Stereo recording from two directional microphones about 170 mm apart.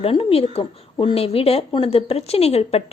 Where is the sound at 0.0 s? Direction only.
35° left (ahead or behind).